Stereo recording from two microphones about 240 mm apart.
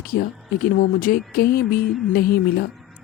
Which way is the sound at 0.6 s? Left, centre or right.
Left.